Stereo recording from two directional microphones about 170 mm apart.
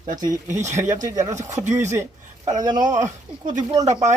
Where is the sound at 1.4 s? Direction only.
45° right (ahead or behind).